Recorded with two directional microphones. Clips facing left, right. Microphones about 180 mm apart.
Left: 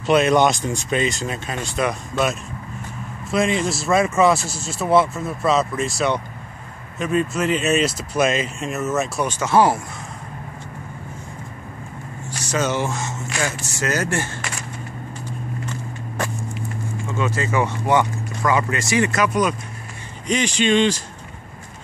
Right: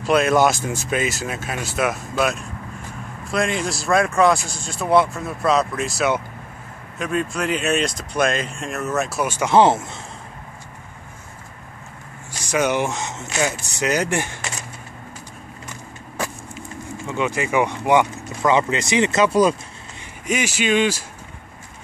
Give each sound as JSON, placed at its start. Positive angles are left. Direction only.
{"t": 0.0, "sound": "speech", "side_deg": 0}
{"t": 12.4, "sound": "speech", "side_deg": -15}
{"t": 15.6, "sound": "a sound", "side_deg": -10}
{"t": 17.1, "sound": "speech", "side_deg": -15}
{"t": 20.2, "sound": "speech", "side_deg": -5}